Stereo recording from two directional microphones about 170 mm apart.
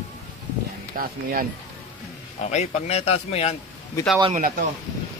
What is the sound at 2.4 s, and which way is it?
A man's voice, 40° left (ahead or behind).